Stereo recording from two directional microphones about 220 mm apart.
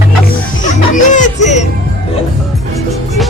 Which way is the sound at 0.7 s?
35° left (ahead or behind).